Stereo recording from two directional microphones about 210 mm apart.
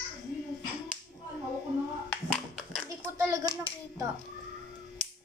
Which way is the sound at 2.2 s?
Centre (ahead or behind).